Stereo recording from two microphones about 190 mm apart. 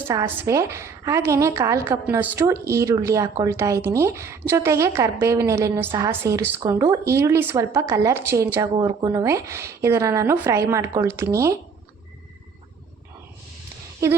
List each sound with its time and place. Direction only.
0.1 s a woman's voice: 15° right (ahead or behind)
8.7 s a woman's voice: 25° right (ahead or behind)
14.0 s a woman's voice: 15° right (ahead or behind)